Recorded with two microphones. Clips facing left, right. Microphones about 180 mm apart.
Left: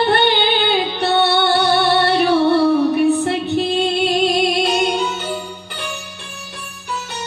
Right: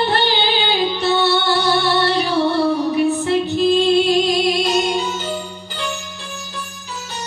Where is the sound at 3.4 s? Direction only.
60° left (ahead or behind).